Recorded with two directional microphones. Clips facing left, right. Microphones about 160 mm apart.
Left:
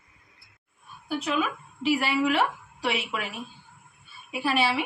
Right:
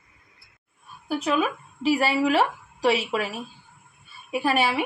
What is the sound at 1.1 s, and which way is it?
A woman's voice, 40° right (ahead or behind).